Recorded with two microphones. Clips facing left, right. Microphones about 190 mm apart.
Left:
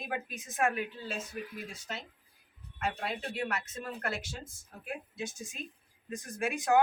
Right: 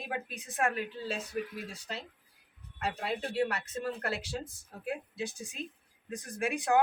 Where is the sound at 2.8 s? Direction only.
35° right (ahead or behind).